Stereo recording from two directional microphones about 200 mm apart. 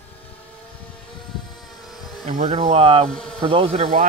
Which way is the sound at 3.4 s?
25° right (ahead or behind).